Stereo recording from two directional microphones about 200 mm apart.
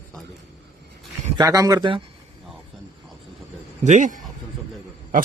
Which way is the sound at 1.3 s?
15° right (ahead or behind).